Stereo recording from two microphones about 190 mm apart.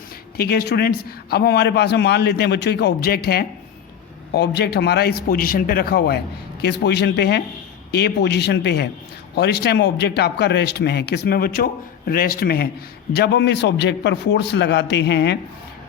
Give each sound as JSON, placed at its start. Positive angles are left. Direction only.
{"t": 0.3, "sound": "speech", "side_deg": 55}